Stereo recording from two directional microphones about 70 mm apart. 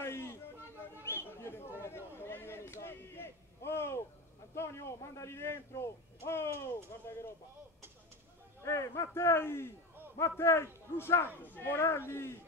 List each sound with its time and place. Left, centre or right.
0.0 s a sound: left
4.6 s a man's voice: left
8.6 s a man's voice: left